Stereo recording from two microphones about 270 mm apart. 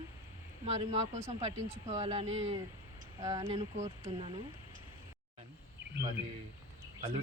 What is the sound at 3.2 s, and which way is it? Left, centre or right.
Speech, centre.